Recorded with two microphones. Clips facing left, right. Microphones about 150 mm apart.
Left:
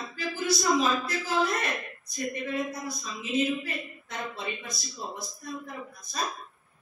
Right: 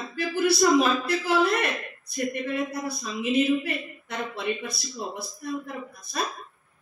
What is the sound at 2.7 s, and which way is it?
Speech, 65° right (ahead or behind).